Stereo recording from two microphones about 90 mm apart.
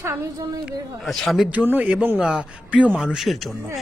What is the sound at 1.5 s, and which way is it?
Speech, 20° right (ahead or behind).